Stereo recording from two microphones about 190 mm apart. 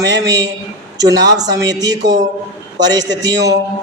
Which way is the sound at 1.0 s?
20° right (ahead or behind).